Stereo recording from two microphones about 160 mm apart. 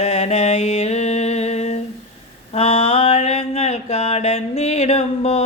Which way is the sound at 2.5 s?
40° left (ahead or behind).